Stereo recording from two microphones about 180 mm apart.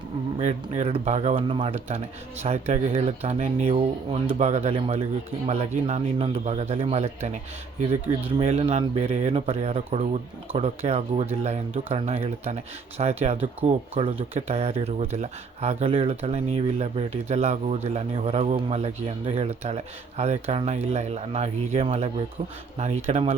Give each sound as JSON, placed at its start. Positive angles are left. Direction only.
{"t": 0.3, "sound": "speech", "side_deg": -40}
{"t": 8.4, "sound": "speech", "side_deg": -35}